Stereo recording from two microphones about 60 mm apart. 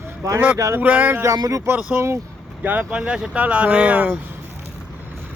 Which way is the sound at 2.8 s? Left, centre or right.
Centre.